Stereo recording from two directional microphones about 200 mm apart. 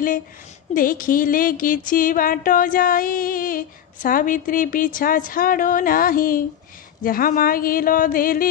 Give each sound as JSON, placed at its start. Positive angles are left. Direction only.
{"t": 0.7, "sound": "music", "side_deg": 45}